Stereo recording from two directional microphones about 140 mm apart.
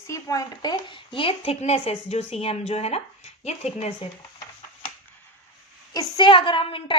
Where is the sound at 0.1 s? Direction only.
25° left (ahead or behind); by 3.9 s 50° left (ahead or behind).